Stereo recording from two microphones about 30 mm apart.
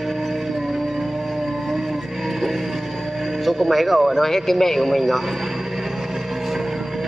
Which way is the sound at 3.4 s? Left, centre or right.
Centre.